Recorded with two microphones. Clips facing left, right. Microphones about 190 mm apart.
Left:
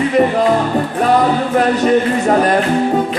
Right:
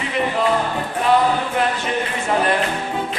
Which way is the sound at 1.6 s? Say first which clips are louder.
Left 9 dB; 40° left (ahead or behind).